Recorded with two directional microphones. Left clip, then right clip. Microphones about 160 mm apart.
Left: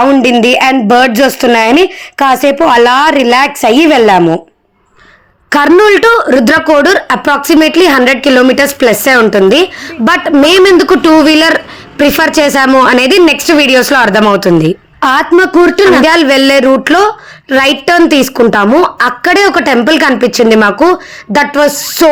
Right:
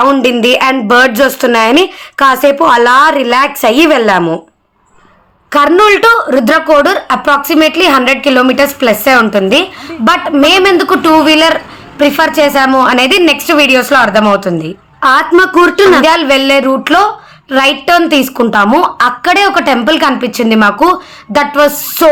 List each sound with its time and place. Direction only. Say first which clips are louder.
0.0 s speech: left 1 dB; 20° left (ahead or behind)
5.5 s speech: left 1 dB; 50° left (ahead or behind)
15.0 s a woman's voice: even; 35° left (ahead or behind)